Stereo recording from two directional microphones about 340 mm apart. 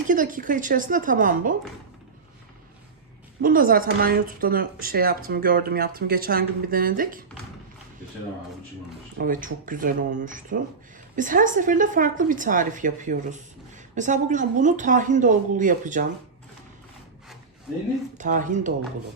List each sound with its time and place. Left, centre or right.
0.1 s speech: right
3.4 s speech: right
9.1 s speech: right
18.2 s speech: right